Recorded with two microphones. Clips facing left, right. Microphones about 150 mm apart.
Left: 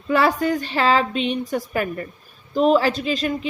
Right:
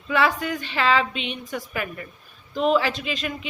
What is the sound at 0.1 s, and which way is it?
Speech, 40° left (ahead or behind).